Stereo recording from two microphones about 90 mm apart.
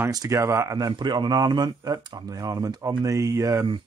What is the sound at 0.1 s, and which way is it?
Speech, 40° right (ahead or behind).